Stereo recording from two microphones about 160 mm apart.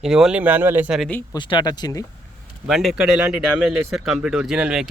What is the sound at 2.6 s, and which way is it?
Speech, centre (ahead or behind).